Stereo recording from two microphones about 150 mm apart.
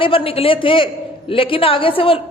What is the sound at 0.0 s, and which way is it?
A man's voice, 35° left (ahead or behind).